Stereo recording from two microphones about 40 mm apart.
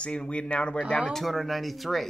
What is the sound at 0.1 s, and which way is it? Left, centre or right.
Speech, left.